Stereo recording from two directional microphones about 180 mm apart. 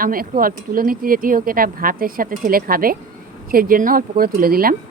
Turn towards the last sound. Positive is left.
turn(degrees=-55)  # may be behind; listen again after turning